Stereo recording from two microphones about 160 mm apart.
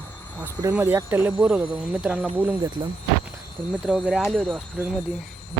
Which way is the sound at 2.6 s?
25° right (ahead or behind).